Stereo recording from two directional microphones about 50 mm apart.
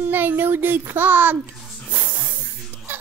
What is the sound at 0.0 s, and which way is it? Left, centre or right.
A child's voice, right.